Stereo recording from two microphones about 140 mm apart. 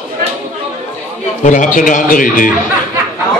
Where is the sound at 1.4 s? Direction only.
65° left (ahead or behind).